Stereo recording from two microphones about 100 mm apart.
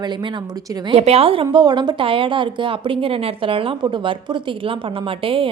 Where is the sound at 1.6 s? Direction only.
50° right (ahead or behind).